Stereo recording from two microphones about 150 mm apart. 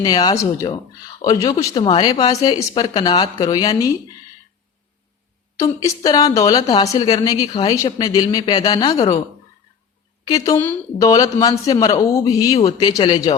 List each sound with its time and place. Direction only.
0.0 s a woman's voice: 25° left (ahead or behind)
1.8 s speech: 40° left (ahead or behind)
2.0 s a woman's voice: 25° left (ahead or behind)
5.5 s a woman's voice: 20° left (ahead or behind)
10.2 s a woman's voice: 25° left (ahead or behind)